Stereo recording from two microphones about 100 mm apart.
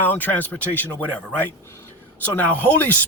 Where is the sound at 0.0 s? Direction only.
15° left (ahead or behind).